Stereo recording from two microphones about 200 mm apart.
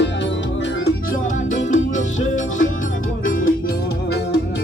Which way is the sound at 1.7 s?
40° left (ahead or behind).